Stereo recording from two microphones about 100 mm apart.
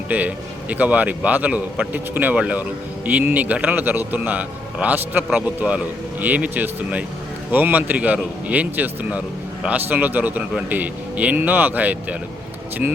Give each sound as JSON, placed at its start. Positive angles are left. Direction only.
{"t": 0.1, "sound": "a man's voice", "side_deg": -15}